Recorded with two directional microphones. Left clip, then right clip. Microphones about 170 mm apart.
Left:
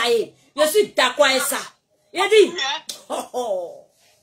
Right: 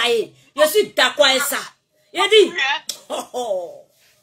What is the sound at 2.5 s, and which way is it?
Speech, 30° left (ahead or behind).